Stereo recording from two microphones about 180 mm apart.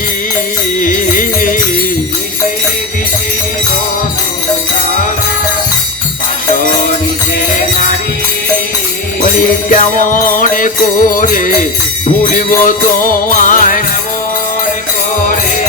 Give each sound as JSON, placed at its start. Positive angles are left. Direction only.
{"t": 0.8, "sound": "music", "side_deg": 45}
{"t": 9.2, "sound": "music", "side_deg": 50}